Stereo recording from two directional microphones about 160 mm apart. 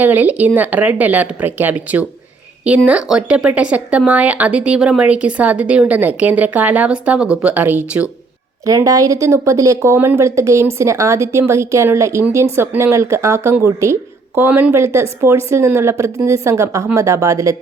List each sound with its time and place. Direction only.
0.0 s speech: 10° right (ahead or behind)